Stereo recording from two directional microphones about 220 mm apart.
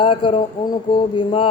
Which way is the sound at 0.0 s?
25° left (ahead or behind).